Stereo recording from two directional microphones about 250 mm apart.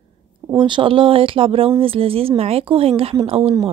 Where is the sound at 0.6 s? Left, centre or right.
Centre.